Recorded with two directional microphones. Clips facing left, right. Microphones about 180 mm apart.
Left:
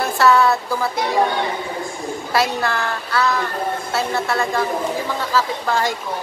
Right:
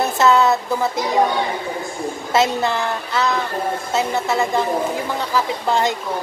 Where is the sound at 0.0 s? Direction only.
20° right (ahead or behind).